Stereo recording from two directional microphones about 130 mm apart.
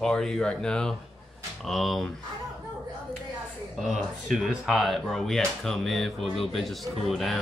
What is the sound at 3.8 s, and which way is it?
Speech, 5° right (ahead or behind).